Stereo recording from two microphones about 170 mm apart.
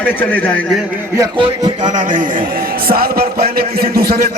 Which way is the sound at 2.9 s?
60° right (ahead or behind).